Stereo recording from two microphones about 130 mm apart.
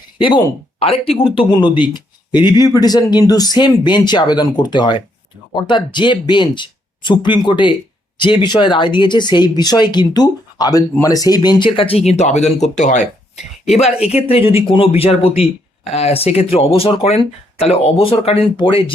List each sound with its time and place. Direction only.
0.2 s speech: 40° left (ahead or behind); by 13.1 s 65° left (ahead or behind)
14.0 s speech: 55° left (ahead or behind)